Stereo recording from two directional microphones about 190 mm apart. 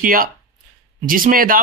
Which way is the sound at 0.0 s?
50° right (ahead or behind).